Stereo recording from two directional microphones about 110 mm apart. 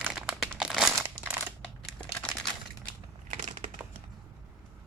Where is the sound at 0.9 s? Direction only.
20° right (ahead or behind).